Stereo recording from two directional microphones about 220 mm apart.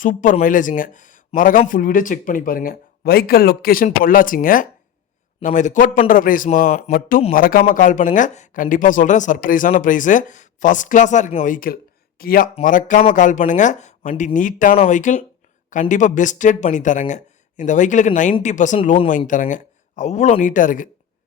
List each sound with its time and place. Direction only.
0.0 s speech: 35° left (ahead or behind)